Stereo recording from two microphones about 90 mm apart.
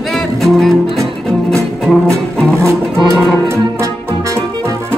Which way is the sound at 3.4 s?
30° right (ahead or behind).